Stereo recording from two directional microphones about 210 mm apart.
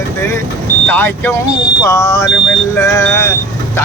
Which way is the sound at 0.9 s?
10° left (ahead or behind).